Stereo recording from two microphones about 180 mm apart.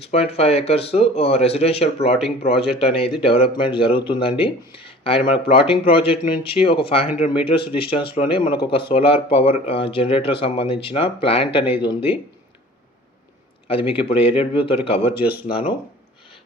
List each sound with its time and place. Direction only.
0.0 s speech: 35° left (ahead or behind)
13.7 s speech: 30° left (ahead or behind)